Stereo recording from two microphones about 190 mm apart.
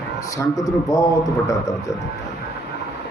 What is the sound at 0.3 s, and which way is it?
Speech, 20° left (ahead or behind).